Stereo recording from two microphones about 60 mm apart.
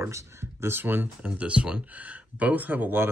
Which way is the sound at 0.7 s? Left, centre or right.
Right.